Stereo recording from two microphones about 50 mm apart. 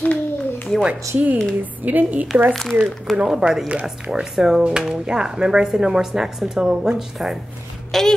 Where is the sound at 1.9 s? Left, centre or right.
Right.